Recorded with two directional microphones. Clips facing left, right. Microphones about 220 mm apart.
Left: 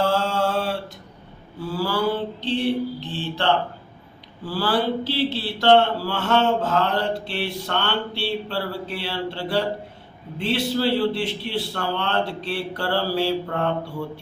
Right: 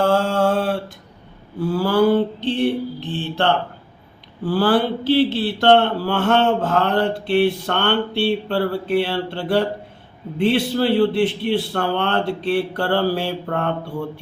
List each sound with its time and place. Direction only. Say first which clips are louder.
0.0 s mantra: right 4 dB; 50° right (ahead or behind)
1.7 s speech: right 7 dB; 55° right (ahead or behind)